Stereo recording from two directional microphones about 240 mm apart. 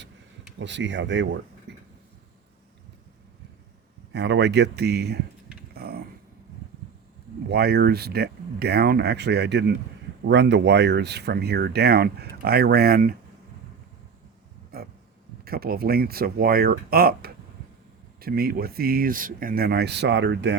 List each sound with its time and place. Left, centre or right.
0.6 s speech: right
1.7 s a sound: right
4.1 s speech: right
5.7 s mechanisms: right
7.4 s speech: right
14.7 s a sound: right
15.4 s speech: right